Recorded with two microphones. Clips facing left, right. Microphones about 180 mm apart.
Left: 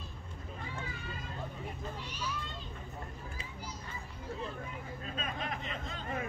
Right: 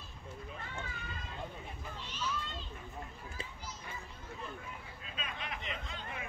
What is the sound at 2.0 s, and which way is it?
Speech, 10° left (ahead or behind).